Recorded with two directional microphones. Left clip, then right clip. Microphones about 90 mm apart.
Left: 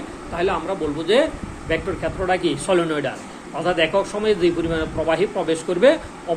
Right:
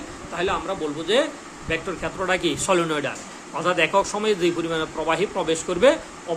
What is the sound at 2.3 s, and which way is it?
Speech, 70° right (ahead or behind).